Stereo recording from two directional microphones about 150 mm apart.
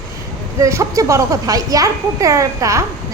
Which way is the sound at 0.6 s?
20° right (ahead or behind).